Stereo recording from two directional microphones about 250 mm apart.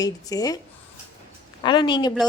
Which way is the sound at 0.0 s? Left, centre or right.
Centre.